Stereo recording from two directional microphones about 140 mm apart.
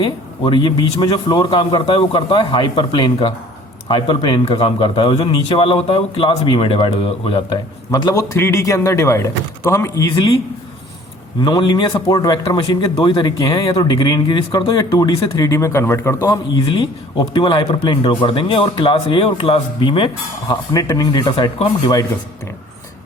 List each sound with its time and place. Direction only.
0.0 s a man's voice: 35° left (ahead or behind)
7.9 s a man's voice: 30° left (ahead or behind)
11.3 s a man's voice: 30° left (ahead or behind)
16.6 s a man's voice: 35° left (ahead or behind)
20.5 s a man's voice: 25° left (ahead or behind)